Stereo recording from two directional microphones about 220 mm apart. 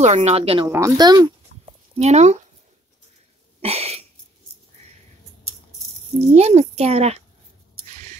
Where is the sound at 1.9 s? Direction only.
30° right (ahead or behind).